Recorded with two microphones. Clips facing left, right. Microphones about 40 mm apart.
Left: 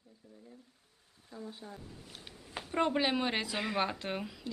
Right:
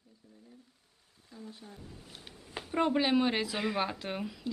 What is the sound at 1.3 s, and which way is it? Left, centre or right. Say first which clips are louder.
Speech: left 2 dB; left.